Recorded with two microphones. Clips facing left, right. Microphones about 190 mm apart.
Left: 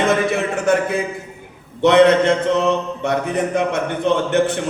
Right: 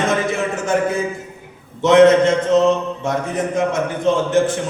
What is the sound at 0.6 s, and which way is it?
A man's voice, 65° left (ahead or behind).